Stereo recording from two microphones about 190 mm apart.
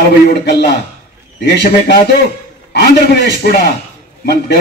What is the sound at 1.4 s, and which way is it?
Speech, 60° left (ahead or behind).